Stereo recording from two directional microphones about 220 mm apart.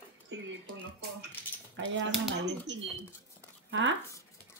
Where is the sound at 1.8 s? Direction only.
55° right (ahead or behind).